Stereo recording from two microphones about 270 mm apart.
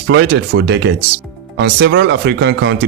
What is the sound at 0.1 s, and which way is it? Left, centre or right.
Speech, right.